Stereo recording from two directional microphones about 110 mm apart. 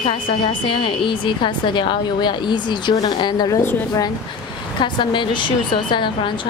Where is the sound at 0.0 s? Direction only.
50° left (ahead or behind).